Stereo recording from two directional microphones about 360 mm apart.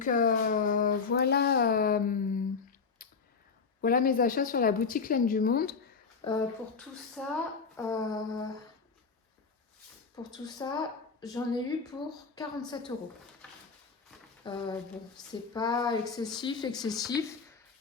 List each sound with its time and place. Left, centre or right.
0.0 s speech: left
3.0 s a sound: left
3.8 s a woman's voice: left
7.2 s a woman's voice: centre
10.3 s a woman's voice: centre
14.4 s a woman's voice: centre